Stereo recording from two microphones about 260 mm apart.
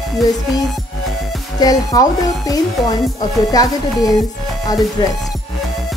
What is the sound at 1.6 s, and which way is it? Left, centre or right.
Speech, centre.